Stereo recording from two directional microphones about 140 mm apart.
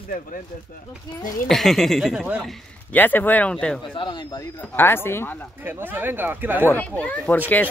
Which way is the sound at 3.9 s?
30° left (ahead or behind).